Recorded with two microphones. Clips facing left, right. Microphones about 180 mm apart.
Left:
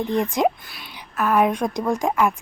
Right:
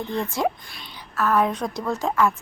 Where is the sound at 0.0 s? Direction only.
15° left (ahead or behind).